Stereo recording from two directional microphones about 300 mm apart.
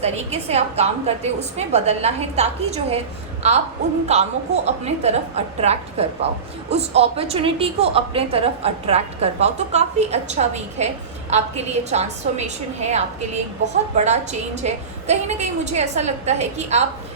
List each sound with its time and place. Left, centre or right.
0.0 s a woman's voice: right
4.0 s a woman's voice: right